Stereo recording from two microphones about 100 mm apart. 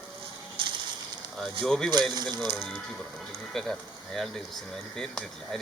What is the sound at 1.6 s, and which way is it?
Speech, 5° left (ahead or behind).